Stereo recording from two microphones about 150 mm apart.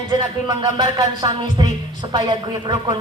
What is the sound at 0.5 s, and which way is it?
Music, 30° right (ahead or behind).